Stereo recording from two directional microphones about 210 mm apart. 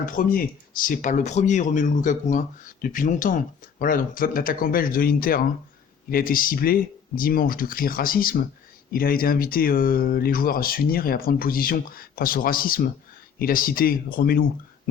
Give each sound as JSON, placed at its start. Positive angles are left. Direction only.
{"t": 0.0, "sound": "speech", "side_deg": 40}